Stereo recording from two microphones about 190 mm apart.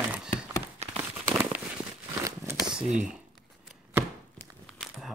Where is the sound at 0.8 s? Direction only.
35° right (ahead or behind).